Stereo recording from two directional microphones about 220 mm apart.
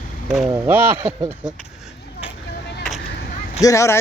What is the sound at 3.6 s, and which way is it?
Speech, 15° left (ahead or behind).